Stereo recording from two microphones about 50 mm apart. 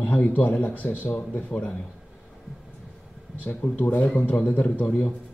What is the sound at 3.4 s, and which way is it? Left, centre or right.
A man's voice, left.